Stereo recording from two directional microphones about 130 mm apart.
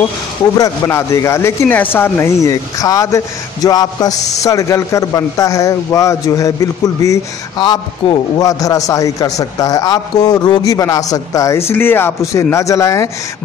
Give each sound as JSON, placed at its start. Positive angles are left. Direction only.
{"t": 0.6, "sound": "a man's voice", "side_deg": 20}